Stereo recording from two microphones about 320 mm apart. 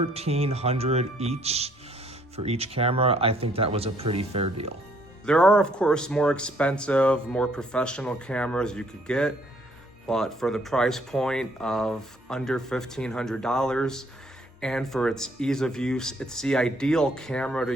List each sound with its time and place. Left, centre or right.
0.0 s speech: centre
5.2 s speech: centre